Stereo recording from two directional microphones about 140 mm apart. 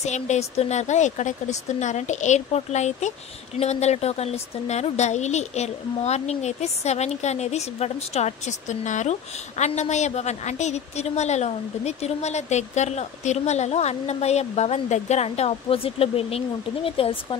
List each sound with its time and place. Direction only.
0.0 s speech: 55° left (ahead or behind)